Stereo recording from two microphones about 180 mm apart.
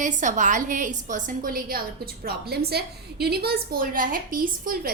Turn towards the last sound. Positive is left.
turn(degrees=-50)  # may be behind; listen again after turning